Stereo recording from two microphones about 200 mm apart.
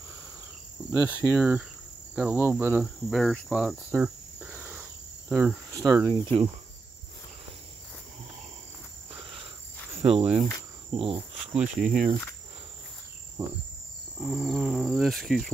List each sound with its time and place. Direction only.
0.9 s cricket: 10° right (ahead or behind)
2.1 s insect: 10° right (ahead or behind)
3.4 s cricket: 5° right (ahead or behind); by 6.5 s 25° right (ahead or behind)
10.0 s speech: 30° right (ahead or behind)
10.9 s cricket: 25° right (ahead or behind)
11.5 s insect: 5° right (ahead or behind)
14.2 s insect: 5° right (ahead or behind)